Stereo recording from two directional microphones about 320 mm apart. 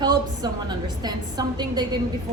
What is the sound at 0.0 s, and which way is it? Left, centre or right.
A woman's voice, centre.